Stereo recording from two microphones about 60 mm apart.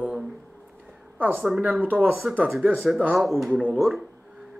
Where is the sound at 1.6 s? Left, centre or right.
Right.